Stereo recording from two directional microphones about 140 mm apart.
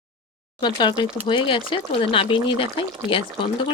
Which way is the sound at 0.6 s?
30° left (ahead or behind).